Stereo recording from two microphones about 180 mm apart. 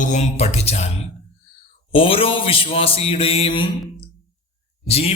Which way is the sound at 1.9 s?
30° left (ahead or behind).